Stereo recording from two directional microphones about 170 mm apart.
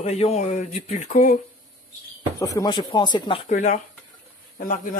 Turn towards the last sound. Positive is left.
turn(degrees=50)  # may be behind; listen again after turning